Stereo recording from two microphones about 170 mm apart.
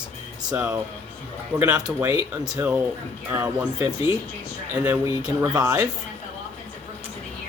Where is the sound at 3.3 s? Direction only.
10° right (ahead or behind).